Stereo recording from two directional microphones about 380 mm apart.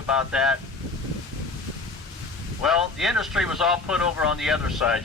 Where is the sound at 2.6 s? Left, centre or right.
Centre.